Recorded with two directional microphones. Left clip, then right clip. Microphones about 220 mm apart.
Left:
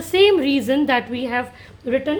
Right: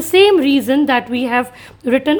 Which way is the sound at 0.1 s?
25° right (ahead or behind).